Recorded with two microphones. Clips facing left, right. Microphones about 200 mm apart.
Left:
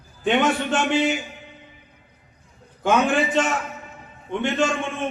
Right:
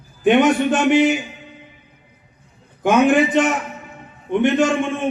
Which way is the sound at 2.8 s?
15° right (ahead or behind).